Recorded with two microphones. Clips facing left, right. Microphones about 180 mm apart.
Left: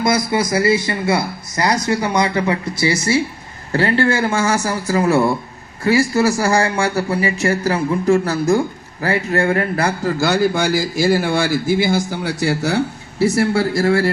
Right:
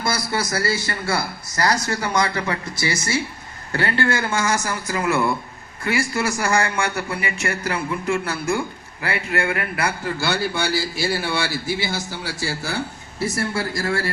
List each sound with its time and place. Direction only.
0.3 s a man's voice: 25° left (ahead or behind); by 12.3 s 50° left (ahead or behind)
12.5 s speech: 70° left (ahead or behind)